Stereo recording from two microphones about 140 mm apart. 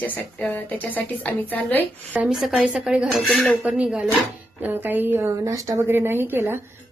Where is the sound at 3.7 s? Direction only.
5° right (ahead or behind).